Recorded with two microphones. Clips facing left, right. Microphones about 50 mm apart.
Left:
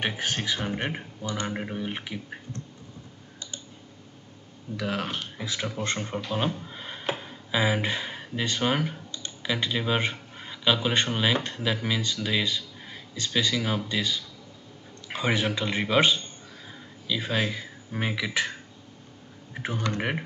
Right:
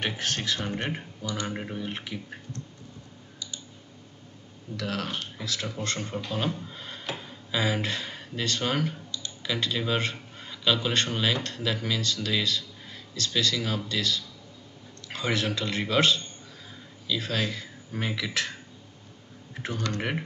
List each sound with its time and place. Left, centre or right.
0.0 s a man's voice: centre
4.7 s a man's voice: centre
19.5 s speech: centre